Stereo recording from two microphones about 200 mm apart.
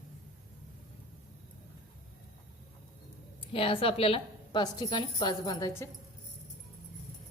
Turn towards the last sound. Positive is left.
turn(degrees=15)  # may be behind; listen again after turning